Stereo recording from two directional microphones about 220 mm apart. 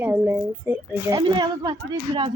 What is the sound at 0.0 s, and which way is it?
Speech, 10° right (ahead or behind).